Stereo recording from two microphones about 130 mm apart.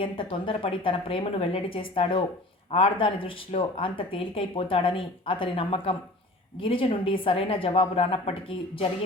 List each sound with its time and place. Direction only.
0.0 s speech: 45° left (ahead or behind)